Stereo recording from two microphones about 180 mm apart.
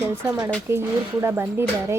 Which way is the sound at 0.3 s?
15° right (ahead or behind).